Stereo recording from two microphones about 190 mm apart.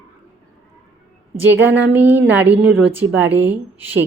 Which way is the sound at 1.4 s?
10° right (ahead or behind).